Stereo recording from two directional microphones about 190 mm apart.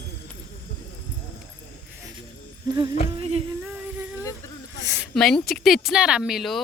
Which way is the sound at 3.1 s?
30° right (ahead or behind).